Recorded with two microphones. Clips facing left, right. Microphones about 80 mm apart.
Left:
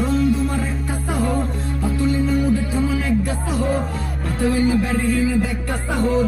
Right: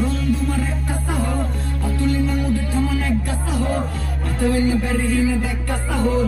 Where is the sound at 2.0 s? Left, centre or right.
Centre.